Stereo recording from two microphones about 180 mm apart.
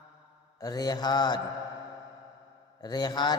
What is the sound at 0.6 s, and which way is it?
Mantra, 20° left (ahead or behind).